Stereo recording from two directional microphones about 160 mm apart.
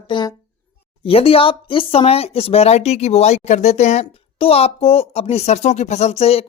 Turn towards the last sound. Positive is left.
turn(degrees=40)  # may be behind; listen again after turning